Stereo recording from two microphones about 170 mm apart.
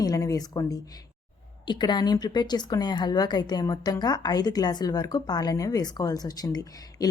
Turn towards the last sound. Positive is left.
turn(degrees=20)  # may be behind; listen again after turning